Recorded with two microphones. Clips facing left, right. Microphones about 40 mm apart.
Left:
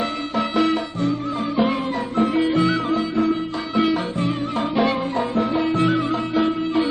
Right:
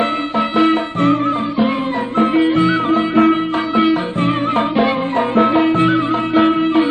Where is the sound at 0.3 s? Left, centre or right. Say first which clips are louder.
Right 5 dB; right.